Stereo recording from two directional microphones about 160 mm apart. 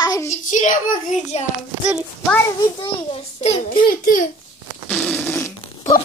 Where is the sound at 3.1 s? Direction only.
40° left (ahead or behind).